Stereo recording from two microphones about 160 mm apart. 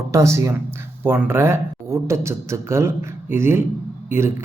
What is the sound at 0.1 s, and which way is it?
Speech, 20° right (ahead or behind).